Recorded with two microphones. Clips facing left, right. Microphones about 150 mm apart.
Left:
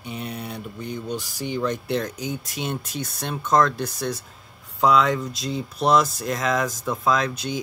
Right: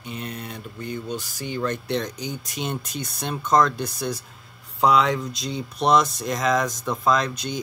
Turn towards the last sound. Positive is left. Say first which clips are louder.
# even
turn(degrees=5)  # may be behind; listen again after turning